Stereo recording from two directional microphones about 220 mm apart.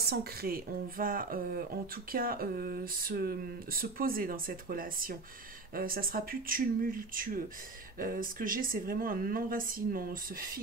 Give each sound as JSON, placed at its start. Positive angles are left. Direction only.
{"t": 0.0, "sound": "speech", "side_deg": -45}